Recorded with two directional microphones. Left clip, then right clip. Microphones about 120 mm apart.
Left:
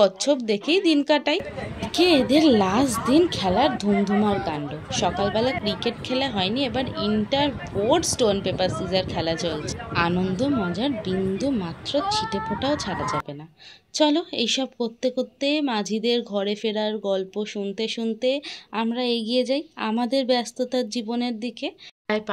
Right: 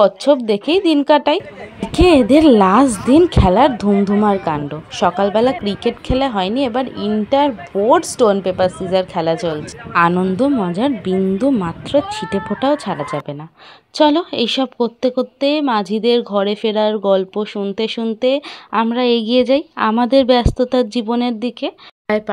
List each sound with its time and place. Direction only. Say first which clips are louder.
0.0 s a woman's voice: right 7 dB; 35° right (ahead or behind)
2.0 s a woman's voice: right 8 dB; 55° right (ahead or behind)
7.7 s speech: right 8 dB; 60° right (ahead or behind)
8.5 s a woman's voice: right 8 dB; 45° right (ahead or behind)
22.0 s speech: right 8 dB; 65° right (ahead or behind)